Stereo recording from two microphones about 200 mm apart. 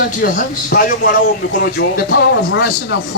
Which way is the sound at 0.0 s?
45° left (ahead or behind).